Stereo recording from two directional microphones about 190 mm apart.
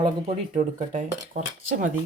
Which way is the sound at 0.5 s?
40° right (ahead or behind).